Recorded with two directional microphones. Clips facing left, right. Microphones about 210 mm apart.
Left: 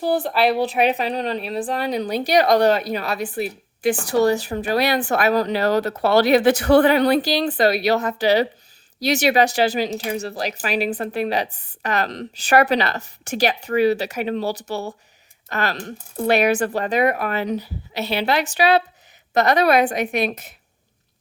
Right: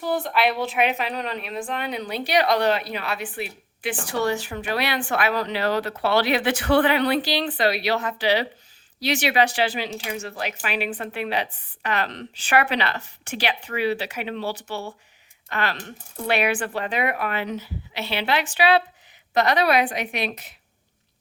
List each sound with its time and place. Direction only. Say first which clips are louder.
0.0 s a woman's voice: left 4 dB; 35° left (ahead or behind)